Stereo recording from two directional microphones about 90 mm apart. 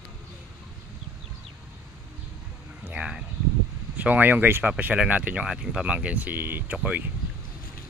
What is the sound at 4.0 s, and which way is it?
Speech, 20° right (ahead or behind).